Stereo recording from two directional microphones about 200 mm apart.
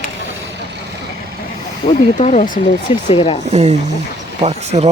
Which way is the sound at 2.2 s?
35° left (ahead or behind).